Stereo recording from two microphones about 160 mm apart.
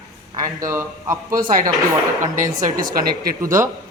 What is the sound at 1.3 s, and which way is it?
A woman's voice, 60° right (ahead or behind).